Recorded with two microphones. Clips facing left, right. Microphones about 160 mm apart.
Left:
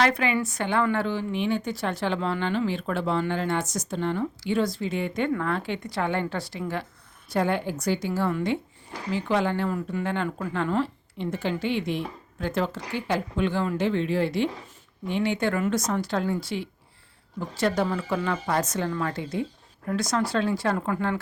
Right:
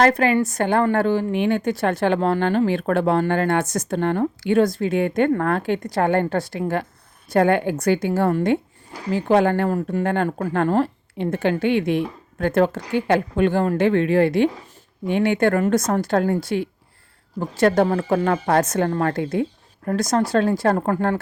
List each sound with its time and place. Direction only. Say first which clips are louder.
0.0 s speech: right 7 dB; 45° right (ahead or behind)